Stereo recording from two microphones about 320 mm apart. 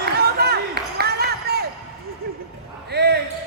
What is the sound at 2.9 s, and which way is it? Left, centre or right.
Basketball bounce, right.